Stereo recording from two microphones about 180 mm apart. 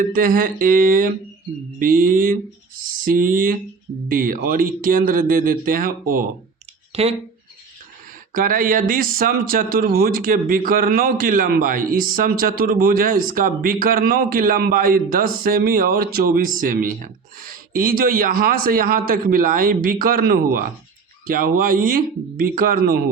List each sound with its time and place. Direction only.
0.0 s a man's voice: 50° right (ahead or behind)
6.9 s speech: 35° right (ahead or behind)
8.3 s a man's voice: 50° right (ahead or behind)